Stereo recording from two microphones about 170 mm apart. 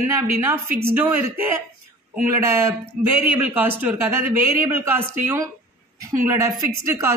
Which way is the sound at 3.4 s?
10° right (ahead or behind).